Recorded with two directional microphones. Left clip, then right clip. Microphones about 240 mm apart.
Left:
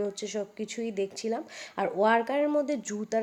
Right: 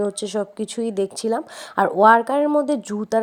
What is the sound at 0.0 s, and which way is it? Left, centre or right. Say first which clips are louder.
Speech: right 9 dB; right.